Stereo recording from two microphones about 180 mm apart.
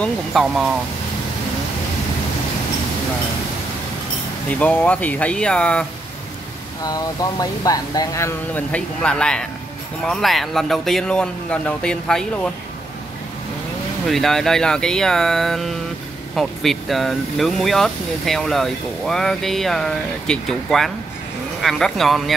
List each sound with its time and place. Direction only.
0.0 s speech: centre (ahead or behind)
4.5 s speech: 10° left (ahead or behind)
6.8 s speech: 20° left (ahead or behind); by 12.3 s 5° left (ahead or behind)
14.0 s speech: centre (ahead or behind)